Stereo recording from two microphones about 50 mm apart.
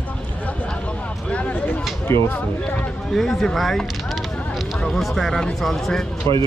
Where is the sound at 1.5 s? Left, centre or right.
Left.